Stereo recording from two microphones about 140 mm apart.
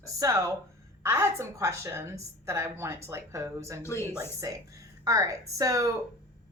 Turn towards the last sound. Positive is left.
turn(degrees=-25)  # may be behind; listen again after turning